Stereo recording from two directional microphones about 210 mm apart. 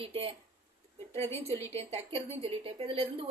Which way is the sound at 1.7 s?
30° right (ahead or behind).